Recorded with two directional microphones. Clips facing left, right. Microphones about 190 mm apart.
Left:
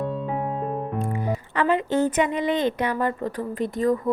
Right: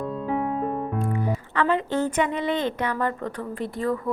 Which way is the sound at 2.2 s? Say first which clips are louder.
Left 2 dB; 15° left (ahead or behind).